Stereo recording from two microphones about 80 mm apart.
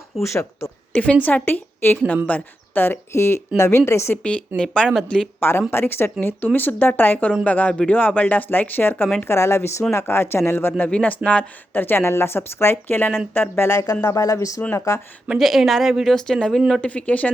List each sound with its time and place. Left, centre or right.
0.2 s speech: left
1.2 s speech: left
4.2 s speech: centre
5.4 s speech: left
10.8 s speech: centre; by 15.0 s left
15.4 s speech: centre
16.8 s speech: centre